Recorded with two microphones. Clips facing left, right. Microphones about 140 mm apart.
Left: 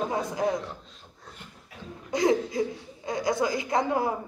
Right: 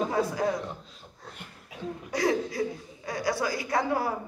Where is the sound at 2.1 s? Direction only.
20° left (ahead or behind).